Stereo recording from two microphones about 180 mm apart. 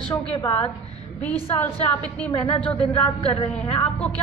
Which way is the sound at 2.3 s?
25° left (ahead or behind).